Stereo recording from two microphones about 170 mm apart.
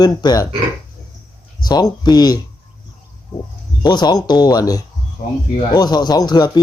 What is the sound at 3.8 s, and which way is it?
Speech, 25° left (ahead or behind).